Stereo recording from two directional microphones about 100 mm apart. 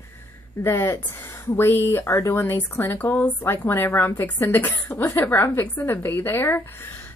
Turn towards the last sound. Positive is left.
turn(degrees=20)  # may be behind; listen again after turning